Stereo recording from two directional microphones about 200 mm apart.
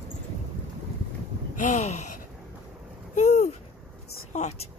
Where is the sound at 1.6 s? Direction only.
35° left (ahead or behind).